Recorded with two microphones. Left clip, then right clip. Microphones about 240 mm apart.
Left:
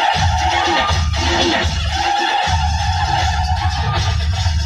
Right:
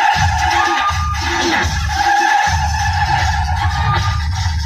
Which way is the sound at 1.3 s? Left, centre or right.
Left.